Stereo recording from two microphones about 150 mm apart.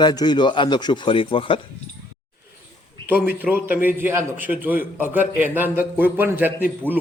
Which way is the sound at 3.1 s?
10° right (ahead or behind).